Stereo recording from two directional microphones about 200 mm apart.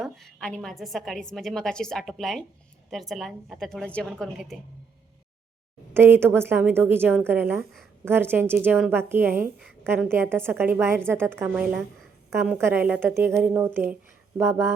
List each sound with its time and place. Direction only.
0.0 s a woman's voice: centre (ahead or behind)
5.9 s a woman's voice: 10° right (ahead or behind)